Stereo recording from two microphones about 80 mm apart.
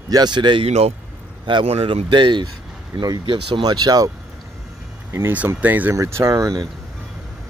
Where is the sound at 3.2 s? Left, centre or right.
Right.